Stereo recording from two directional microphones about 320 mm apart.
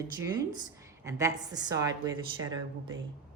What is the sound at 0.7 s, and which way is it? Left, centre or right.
A woman's voice, centre.